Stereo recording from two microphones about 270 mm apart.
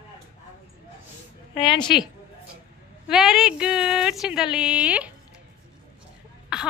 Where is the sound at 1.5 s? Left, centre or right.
Centre.